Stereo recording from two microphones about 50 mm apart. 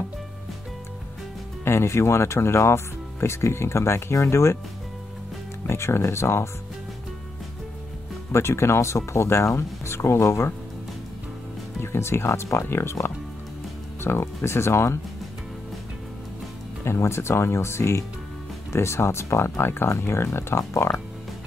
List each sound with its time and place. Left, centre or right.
1.6 s speech: left
5.7 s speech: left
8.3 s speech: left
11.8 s speech: left
14.0 s speech: left
16.8 s speech: left
20.7 s speech: left